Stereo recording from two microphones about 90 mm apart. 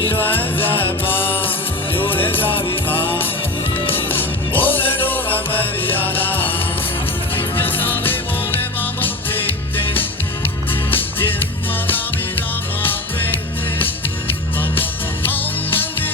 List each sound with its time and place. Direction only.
0.2 s music: 20° left (ahead or behind)
14.6 s music: 20° left (ahead or behind)